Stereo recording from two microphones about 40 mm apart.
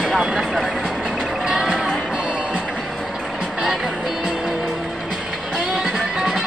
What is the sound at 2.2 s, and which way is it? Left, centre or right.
Music, right.